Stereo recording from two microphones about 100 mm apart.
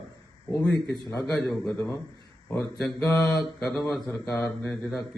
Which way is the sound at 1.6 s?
30° left (ahead or behind).